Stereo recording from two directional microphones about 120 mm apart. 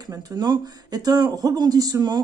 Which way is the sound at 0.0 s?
35° right (ahead or behind).